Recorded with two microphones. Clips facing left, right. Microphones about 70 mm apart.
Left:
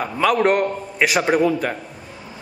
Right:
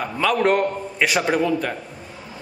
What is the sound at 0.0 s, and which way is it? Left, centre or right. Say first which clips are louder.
A man's voice: left 2 dB; centre.